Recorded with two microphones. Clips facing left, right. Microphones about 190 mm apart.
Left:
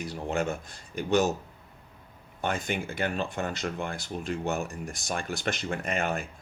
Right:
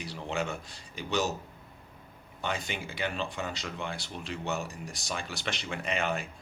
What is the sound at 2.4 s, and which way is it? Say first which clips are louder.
Speech: left 5 dB; 50° left (ahead or behind).